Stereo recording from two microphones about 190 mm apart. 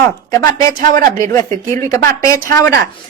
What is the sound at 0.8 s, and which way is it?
Speech, 45° right (ahead or behind).